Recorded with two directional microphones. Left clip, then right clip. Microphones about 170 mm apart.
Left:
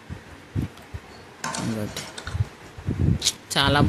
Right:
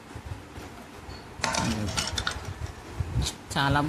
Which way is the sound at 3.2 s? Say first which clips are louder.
Left 5 dB; 20° left (ahead or behind).